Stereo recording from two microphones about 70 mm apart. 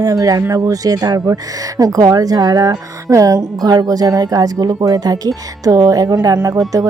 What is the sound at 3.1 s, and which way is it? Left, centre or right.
Speech, right.